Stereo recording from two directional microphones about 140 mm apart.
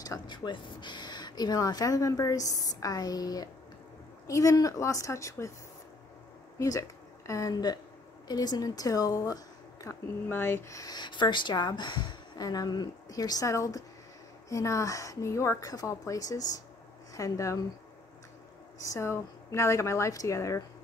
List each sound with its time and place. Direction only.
0.0 s speech: 30° left (ahead or behind)
6.6 s a woman's voice: 20° left (ahead or behind)
10.2 s speech: 15° left (ahead or behind)
18.8 s speech: 20° left (ahead or behind)